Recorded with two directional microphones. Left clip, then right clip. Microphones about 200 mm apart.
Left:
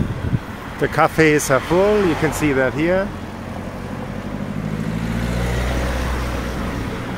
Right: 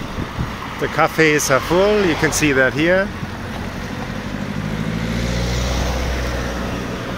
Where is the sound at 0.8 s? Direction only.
25° left (ahead or behind).